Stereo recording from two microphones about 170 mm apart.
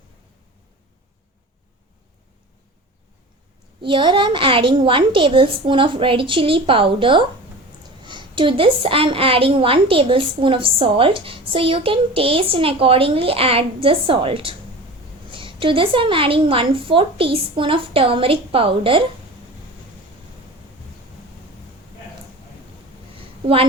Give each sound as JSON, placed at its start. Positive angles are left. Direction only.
{"t": 3.8, "sound": "a woman's voice", "side_deg": -30}